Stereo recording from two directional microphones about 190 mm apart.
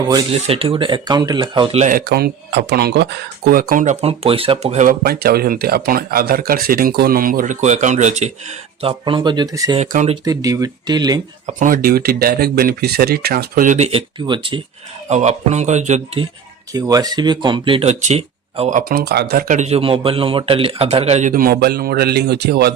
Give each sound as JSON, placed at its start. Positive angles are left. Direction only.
{"t": 0.0, "sound": "speech", "side_deg": -20}
{"t": 0.3, "sound": "speech", "side_deg": -30}
{"t": 1.8, "sound": "speech", "side_deg": -45}
{"t": 3.5, "sound": "speech", "side_deg": -50}
{"t": 9.7, "sound": "speech", "side_deg": -40}
{"t": 10.2, "sound": "speech", "side_deg": -20}
{"t": 11.4, "sound": "speech", "side_deg": -45}
{"t": 15.1, "sound": "speech", "side_deg": -35}
{"t": 16.7, "sound": "speech", "side_deg": -20}
{"t": 18.8, "sound": "speech", "side_deg": -50}